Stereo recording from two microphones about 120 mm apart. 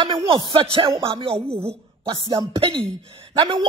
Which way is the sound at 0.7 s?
45° right (ahead or behind).